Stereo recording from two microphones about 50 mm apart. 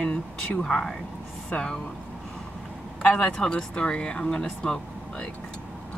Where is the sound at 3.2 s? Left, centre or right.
Centre.